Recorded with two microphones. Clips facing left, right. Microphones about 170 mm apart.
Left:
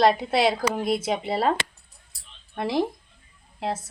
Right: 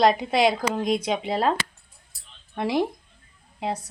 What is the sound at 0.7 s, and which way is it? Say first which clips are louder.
Speech: right 1 dB; 5° left (ahead or behind).